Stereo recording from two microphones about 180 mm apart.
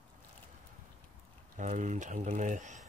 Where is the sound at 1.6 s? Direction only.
40° right (ahead or behind).